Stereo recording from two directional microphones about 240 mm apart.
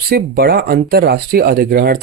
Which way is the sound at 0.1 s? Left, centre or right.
Right.